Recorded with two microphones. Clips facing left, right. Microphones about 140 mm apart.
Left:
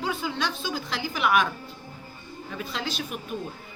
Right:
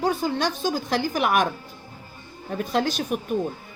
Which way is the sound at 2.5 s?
50° right (ahead or behind).